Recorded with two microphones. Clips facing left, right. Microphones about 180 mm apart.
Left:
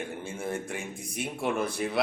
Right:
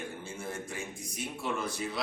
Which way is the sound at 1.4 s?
60° left (ahead or behind).